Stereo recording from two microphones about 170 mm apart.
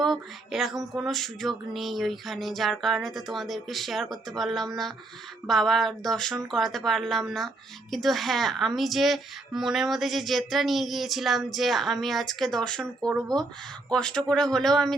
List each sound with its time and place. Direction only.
0.0 s speech: centre (ahead or behind)